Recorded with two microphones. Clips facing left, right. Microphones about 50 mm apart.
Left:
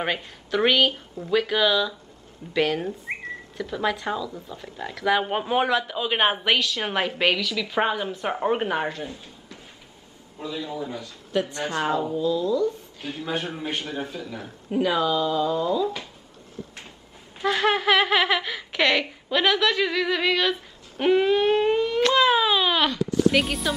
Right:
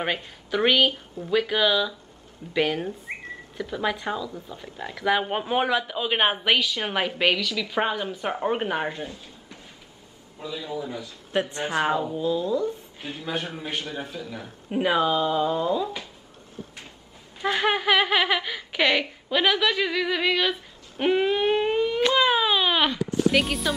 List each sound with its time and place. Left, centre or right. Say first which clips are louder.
0.0 s a woman's voice: left 1 dB; centre
10.4 s speech: left 1 dB; centre
11.3 s speech: right 1 dB; right
13.1 s speech: left 2 dB; centre
14.4 s speech: left 1 dB; right
17.5 s speech: left 1 dB; centre
21.0 s a sound: left 2 dB; centre
23.3 s speech: even; centre